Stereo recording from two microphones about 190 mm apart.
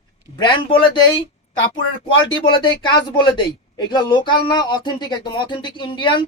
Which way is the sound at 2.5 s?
25° left (ahead or behind).